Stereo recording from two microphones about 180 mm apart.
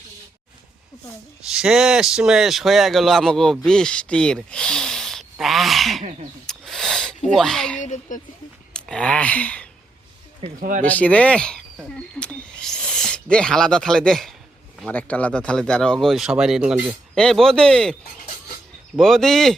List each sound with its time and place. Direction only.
1.5 s speech: centre (ahead or behind)
6.5 s snake: centre (ahead or behind)
7.3 s speech: centre (ahead or behind)
7.8 s speech: 40° left (ahead or behind)
8.7 s speech: 5° left (ahead or behind)
10.6 s speech: 45° right (ahead or behind)
10.8 s speech: 10° left (ahead or behind)
18.9 s speech: centre (ahead or behind)